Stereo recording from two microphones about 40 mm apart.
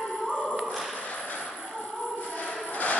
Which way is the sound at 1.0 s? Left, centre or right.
Left.